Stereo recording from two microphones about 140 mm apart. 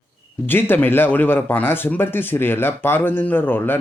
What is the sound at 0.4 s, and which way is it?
Speech, 15° left (ahead or behind).